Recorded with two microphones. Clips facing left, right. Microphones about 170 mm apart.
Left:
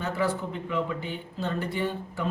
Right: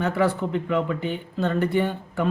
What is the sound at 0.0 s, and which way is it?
Speech, 65° right (ahead or behind).